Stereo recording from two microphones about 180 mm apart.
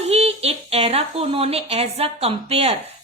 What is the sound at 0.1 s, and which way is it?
A woman's voice, 35° right (ahead or behind).